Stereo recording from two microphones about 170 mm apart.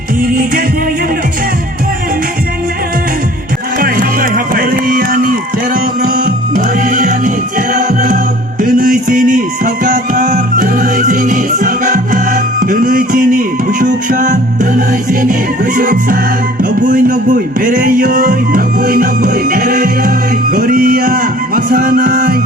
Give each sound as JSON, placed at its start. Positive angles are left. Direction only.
{"t": 0.2, "sound": "music", "side_deg": -60}
{"t": 3.8, "sound": "music", "side_deg": -55}